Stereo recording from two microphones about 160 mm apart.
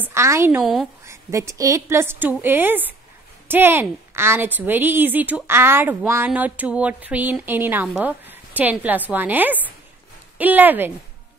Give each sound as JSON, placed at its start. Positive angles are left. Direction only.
{"t": 0.0, "sound": "a woman's voice", "side_deg": -15}
{"t": 0.6, "sound": "speech", "side_deg": -5}
{"t": 1.0, "sound": "a woman's voice", "side_deg": -20}